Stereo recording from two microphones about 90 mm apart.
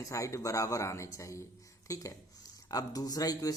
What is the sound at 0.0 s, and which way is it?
Speech, 35° left (ahead or behind).